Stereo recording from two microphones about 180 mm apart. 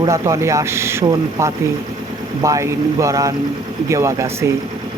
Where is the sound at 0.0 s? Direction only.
15° right (ahead or behind).